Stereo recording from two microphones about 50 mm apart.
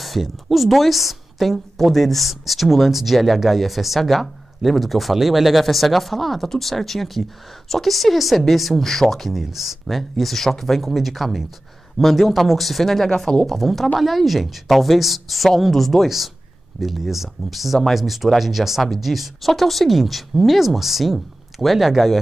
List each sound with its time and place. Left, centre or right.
0.0 s a woman's voice: centre
13.5 s a woman's voice: centre